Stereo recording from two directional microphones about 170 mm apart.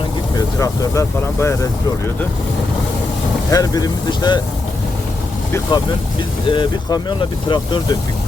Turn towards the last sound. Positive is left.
turn(degrees=25)  # may be behind; listen again after turning